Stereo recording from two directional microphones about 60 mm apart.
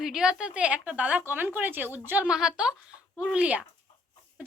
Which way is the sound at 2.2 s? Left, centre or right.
Centre.